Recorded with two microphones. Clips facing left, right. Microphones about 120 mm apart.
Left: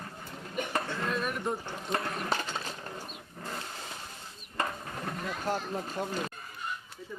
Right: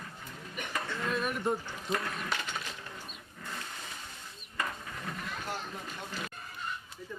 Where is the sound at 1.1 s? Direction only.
Centre (ahead or behind).